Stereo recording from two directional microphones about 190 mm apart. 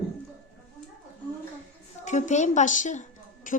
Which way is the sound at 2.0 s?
40° left (ahead or behind).